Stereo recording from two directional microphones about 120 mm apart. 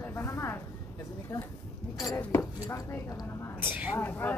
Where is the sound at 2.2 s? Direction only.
20° left (ahead or behind).